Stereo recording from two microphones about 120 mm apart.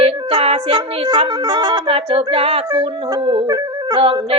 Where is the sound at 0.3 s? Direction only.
50° right (ahead or behind).